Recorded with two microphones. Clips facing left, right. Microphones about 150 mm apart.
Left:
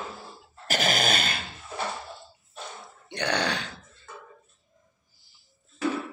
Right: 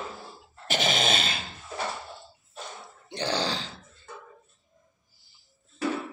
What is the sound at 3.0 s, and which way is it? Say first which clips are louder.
Grunt: left 1 dB; 65° left (ahead or behind).